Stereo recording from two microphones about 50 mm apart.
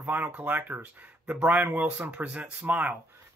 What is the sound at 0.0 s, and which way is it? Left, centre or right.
Speech, right.